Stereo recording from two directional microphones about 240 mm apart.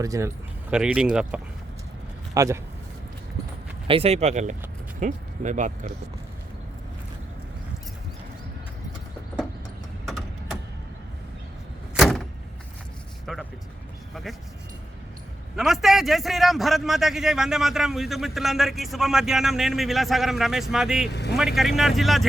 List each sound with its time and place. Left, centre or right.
0.0 s a man's voice: centre
3.8 s speech: right
10.1 s a sound: centre
11.9 s vehicle: centre
13.2 s vehicle: centre
15.5 s a man's voice: centre
21.1 s speech: left
21.3 s a man's voice: centre